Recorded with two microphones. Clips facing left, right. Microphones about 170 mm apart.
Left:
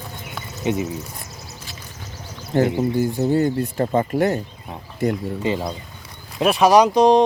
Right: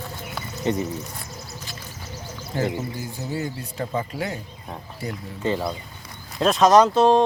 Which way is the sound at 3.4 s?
55° left (ahead or behind).